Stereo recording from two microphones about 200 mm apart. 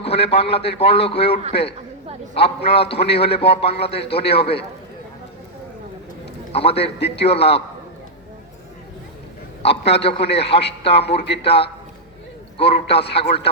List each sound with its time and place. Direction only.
0.0 s a man's voice: 30° left (ahead or behind)
6.5 s a man's voice: 30° left (ahead or behind)
9.6 s a man's voice: 30° left (ahead or behind)